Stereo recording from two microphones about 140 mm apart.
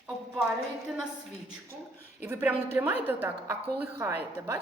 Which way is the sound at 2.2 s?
15° right (ahead or behind).